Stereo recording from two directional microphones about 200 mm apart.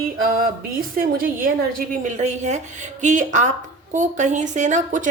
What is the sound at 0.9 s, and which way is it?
Speech, 45° right (ahead or behind).